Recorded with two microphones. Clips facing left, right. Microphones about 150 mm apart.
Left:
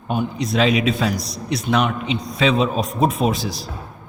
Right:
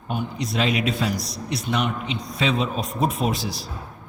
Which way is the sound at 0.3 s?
90° left.